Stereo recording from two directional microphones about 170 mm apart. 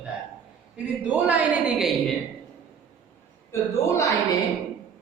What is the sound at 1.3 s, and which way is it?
Speech, 5° right (ahead or behind).